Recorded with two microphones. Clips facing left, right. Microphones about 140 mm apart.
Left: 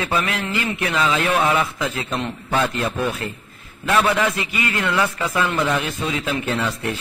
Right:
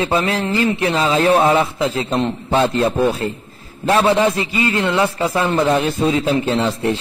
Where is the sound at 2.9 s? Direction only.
35° right (ahead or behind).